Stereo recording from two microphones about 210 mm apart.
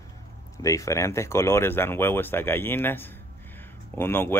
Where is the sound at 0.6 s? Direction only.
15° left (ahead or behind).